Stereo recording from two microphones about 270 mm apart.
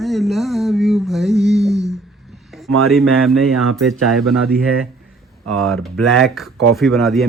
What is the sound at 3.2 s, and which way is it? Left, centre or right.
Speech, centre.